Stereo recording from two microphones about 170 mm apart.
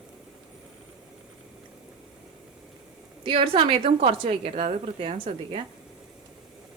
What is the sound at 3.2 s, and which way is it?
A woman's voice, 30° right (ahead or behind).